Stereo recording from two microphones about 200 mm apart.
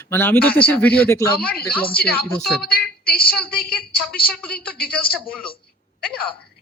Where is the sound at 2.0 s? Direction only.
50° left (ahead or behind).